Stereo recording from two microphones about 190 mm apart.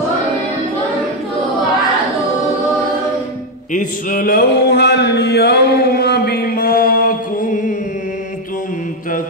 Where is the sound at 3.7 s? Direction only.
45° left (ahead or behind).